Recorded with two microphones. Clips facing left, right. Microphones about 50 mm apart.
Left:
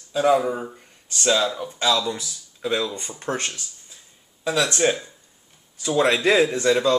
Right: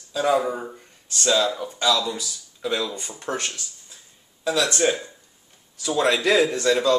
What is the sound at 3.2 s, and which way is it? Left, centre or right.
Speech, left.